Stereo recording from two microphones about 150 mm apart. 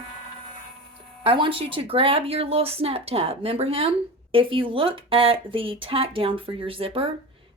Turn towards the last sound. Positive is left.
turn(degrees=-40)  # may be behind; listen again after turning